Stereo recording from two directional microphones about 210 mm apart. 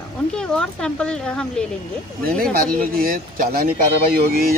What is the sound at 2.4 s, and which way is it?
Speech, 45° right (ahead or behind).